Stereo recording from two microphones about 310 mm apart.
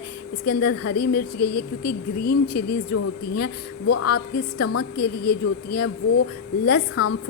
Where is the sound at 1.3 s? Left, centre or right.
Left.